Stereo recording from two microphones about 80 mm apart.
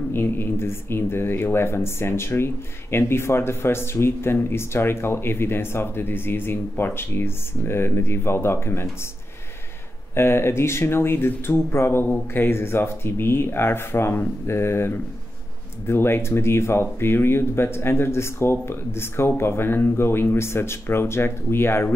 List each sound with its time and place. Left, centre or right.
0.1 s speech: left
10.1 s speech: left